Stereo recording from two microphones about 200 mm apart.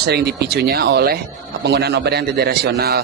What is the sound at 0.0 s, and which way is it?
A man's voice, 55° right (ahead or behind).